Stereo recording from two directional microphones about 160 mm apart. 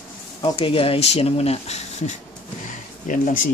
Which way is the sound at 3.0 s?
55° left (ahead or behind).